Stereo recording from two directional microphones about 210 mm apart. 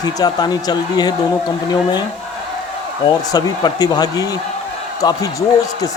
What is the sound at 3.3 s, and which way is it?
Speech, 20° left (ahead or behind).